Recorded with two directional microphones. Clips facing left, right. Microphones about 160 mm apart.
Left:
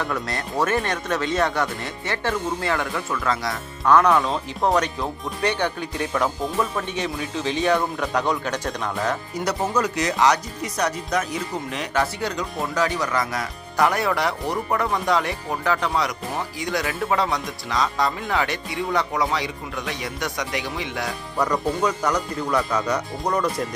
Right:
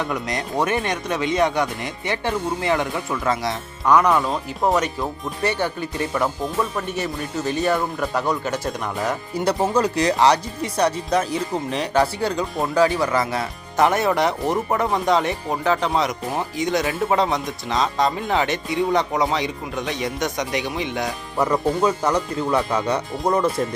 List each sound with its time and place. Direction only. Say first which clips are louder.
0.0 s speech: right 2 dB; 15° right (ahead or behind)
3.8 s speech: even; 10° right (ahead or behind)
9.4 s speech: right 4 dB; 30° right (ahead or behind)